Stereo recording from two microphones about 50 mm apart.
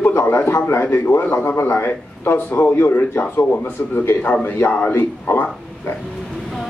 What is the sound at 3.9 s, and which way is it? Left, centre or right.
A man's voice, left.